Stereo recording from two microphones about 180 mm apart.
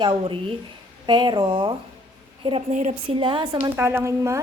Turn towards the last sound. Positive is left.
turn(degrees=-15)  # may be behind; listen again after turning